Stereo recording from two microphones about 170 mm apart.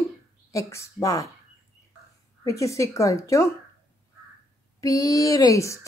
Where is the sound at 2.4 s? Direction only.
20° left (ahead or behind).